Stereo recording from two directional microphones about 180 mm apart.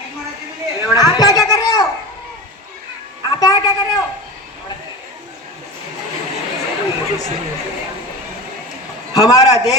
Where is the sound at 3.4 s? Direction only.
20° left (ahead or behind).